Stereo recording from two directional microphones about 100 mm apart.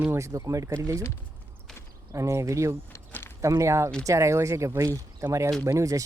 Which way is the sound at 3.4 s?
30° right (ahead or behind).